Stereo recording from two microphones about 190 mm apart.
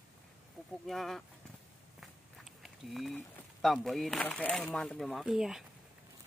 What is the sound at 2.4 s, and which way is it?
Speech, centre (ahead or behind).